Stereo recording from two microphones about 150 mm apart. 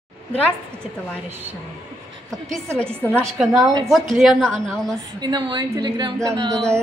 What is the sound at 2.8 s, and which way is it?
A woman's voice, 10° left (ahead or behind).